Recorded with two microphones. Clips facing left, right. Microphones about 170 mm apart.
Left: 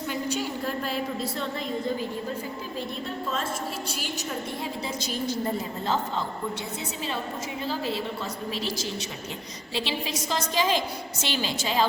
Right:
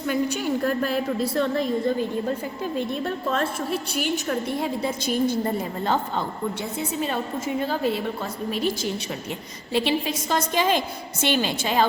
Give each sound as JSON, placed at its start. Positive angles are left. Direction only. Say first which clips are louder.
{"t": 0.1, "sound": "a woman's voice", "louder": "right 7 dB", "side_deg": -60}